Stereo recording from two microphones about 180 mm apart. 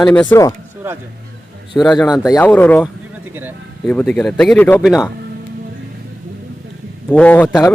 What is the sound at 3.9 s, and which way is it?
Speech, 5° left (ahead or behind).